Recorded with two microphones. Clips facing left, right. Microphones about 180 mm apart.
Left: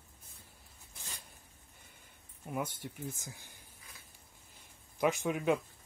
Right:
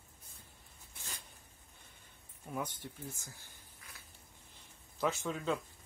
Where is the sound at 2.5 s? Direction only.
10° left (ahead or behind).